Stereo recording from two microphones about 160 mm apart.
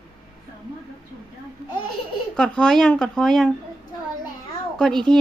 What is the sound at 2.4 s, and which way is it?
Speech, 5° left (ahead or behind).